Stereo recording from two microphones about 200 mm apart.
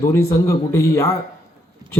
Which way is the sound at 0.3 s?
15° left (ahead or behind).